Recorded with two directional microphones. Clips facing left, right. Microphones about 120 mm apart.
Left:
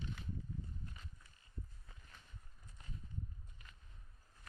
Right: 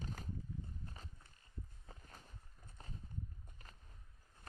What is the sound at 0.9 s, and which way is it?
Walk, 35° right (ahead or behind).